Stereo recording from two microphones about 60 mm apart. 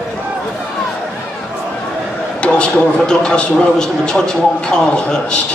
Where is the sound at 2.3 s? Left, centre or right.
Centre.